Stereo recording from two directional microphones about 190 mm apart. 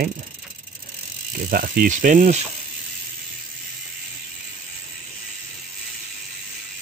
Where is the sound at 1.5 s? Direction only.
50° right (ahead or behind).